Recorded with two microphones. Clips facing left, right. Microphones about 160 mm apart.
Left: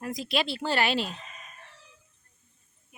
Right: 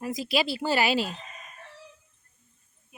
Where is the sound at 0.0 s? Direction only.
5° right (ahead or behind).